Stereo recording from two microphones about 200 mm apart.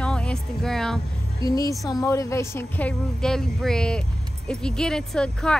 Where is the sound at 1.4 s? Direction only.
20° left (ahead or behind).